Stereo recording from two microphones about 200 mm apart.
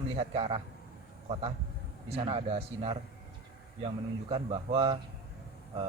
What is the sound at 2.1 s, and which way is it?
A man's voice, 30° right (ahead or behind).